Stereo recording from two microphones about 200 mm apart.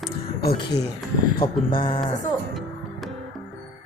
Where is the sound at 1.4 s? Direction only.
25° left (ahead or behind).